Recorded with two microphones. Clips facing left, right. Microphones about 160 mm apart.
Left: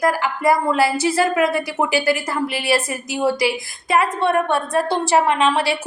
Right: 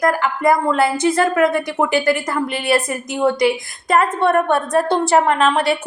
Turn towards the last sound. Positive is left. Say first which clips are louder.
# right 2 dB
turn(degrees=0)  # may be behind; listen again after turning